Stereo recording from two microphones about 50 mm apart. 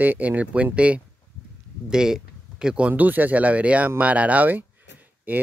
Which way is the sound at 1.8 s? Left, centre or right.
Centre.